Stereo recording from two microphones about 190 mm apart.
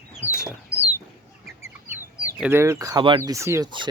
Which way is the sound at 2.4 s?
10° right (ahead or behind).